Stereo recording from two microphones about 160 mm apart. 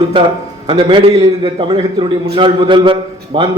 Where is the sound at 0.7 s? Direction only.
30° right (ahead or behind).